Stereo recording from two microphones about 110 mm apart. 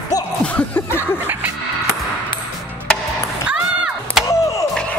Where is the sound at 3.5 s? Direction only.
10° right (ahead or behind).